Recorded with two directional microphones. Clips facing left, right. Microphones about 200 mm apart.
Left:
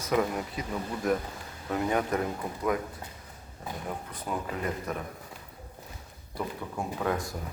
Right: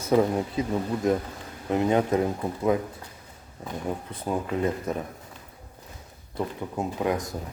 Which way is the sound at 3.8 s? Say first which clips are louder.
Right 6 dB; 30° right (ahead or behind).